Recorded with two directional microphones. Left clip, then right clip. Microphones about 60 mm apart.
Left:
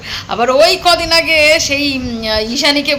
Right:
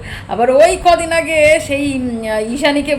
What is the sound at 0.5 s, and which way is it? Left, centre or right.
A woman's voice, right.